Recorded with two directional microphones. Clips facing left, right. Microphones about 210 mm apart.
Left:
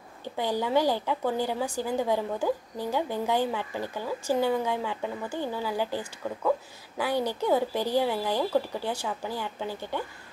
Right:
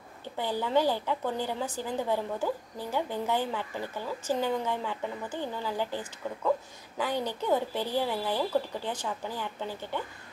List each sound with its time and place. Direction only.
0.4 s a woman's voice: 15° left (ahead or behind)